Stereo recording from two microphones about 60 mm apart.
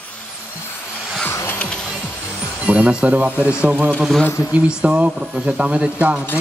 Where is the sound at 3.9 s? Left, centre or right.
Centre.